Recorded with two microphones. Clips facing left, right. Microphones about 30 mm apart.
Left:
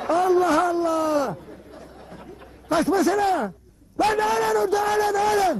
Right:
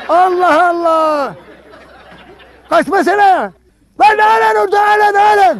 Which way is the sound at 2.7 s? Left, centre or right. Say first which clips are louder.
Right 9 dB; right.